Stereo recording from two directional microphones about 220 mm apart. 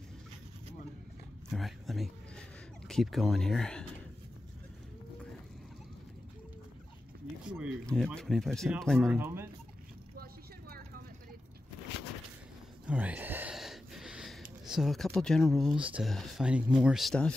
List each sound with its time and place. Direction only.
1.5 s speech: centre (ahead or behind)
7.4 s speech: centre (ahead or behind)
9.2 s speech: 10° right (ahead or behind)
10.1 s vehicle: 45° right (ahead or behind)
12.8 s speech: 5° right (ahead or behind)